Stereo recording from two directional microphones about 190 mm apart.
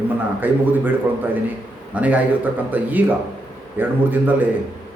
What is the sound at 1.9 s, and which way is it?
A man's voice, 10° right (ahead or behind).